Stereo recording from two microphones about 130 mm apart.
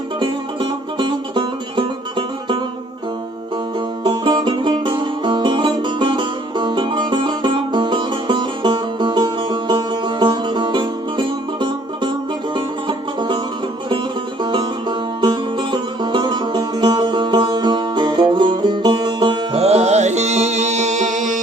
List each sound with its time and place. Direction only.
0.2 s music: 35° right (ahead or behind)
4.0 s music: 35° right (ahead or behind)
14.4 s music: 40° right (ahead or behind)
19.5 s music: 55° right (ahead or behind); by 21.4 s 75° right (ahead or behind)